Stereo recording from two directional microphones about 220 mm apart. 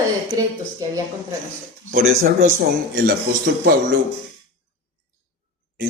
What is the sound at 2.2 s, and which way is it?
Speech, 40° right (ahead or behind).